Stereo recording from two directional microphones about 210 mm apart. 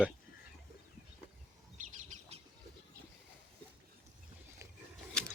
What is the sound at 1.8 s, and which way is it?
Bird, 35° right (ahead or behind).